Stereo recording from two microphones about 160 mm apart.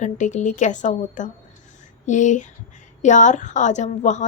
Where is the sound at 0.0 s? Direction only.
50° left (ahead or behind).